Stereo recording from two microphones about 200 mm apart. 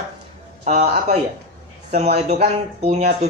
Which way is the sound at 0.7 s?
35° right (ahead or behind).